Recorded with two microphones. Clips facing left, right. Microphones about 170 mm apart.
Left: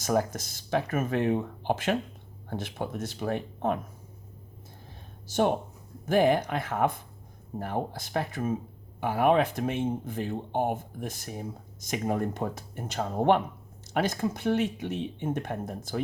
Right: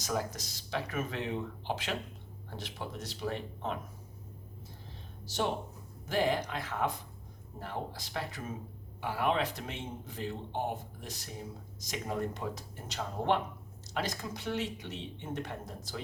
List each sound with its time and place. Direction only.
0.0 s speech: 55° left (ahead or behind)
5.3 s speech: 50° left (ahead or behind)